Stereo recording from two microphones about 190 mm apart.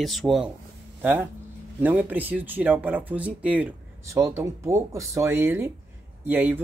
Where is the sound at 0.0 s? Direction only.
Centre (ahead or behind).